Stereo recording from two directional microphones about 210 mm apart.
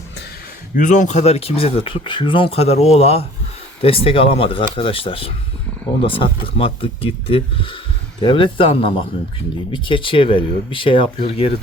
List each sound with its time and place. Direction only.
0.8 s speech: 35° left (ahead or behind)